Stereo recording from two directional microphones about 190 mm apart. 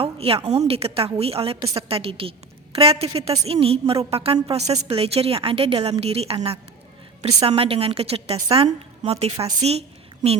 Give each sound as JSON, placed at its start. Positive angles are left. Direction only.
{"t": 0.0, "sound": "a woman's voice", "side_deg": -30}
{"t": 4.6, "sound": "a woman's voice", "side_deg": -20}
{"t": 4.9, "sound": "a woman's voice", "side_deg": -30}